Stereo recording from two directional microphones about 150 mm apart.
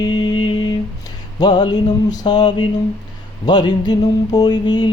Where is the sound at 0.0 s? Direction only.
30° left (ahead or behind).